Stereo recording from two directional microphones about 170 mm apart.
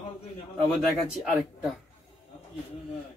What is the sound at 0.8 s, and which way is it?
Speech, centre (ahead or behind).